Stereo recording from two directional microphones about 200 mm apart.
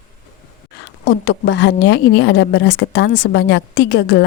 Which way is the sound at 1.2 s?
60° left (ahead or behind).